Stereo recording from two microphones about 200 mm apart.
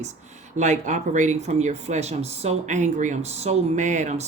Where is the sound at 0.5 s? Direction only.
35° right (ahead or behind).